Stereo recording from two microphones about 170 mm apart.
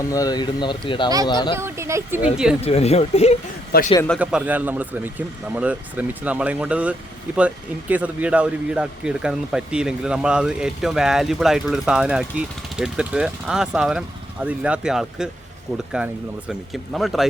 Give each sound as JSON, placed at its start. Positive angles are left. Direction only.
{"t": 0.1, "sound": "speech", "side_deg": 20}
{"t": 1.5, "sound": "speech", "side_deg": -15}
{"t": 2.6, "sound": "speech", "side_deg": 35}
{"t": 3.7, "sound": "a man's voice", "side_deg": 65}
{"t": 4.2, "sound": "speech", "side_deg": -5}